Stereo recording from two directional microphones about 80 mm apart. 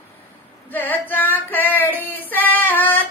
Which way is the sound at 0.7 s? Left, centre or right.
Left.